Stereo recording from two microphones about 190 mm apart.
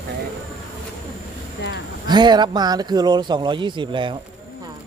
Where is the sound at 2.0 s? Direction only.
20° right (ahead or behind).